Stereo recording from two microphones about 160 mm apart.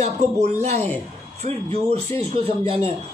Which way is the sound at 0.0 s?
45° right (ahead or behind).